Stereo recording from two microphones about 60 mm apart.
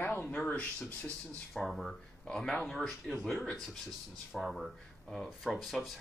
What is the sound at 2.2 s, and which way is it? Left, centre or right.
Speech, centre.